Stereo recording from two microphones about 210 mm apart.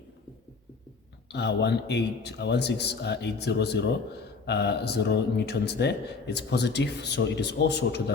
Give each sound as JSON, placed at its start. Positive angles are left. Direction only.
{"t": 1.3, "sound": "a man's voice", "side_deg": 55}